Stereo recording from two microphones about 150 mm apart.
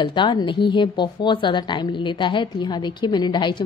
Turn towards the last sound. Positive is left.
turn(degrees=30)  # may be behind; listen again after turning